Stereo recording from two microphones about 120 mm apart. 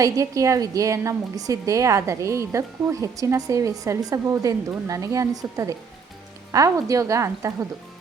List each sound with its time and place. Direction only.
0.0 s a woman's voice: 25° right (ahead or behind)